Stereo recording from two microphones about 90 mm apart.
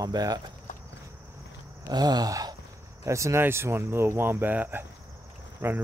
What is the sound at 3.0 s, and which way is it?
Speech, 35° right (ahead or behind).